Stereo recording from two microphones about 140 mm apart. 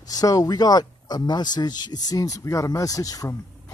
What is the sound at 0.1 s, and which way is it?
Speech, 25° left (ahead or behind).